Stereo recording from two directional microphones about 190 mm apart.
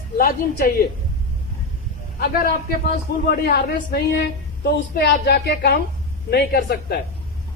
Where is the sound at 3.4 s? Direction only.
55° left (ahead or behind).